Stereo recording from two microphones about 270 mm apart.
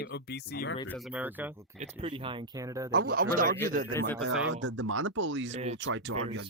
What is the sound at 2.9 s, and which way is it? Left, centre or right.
Speech, right.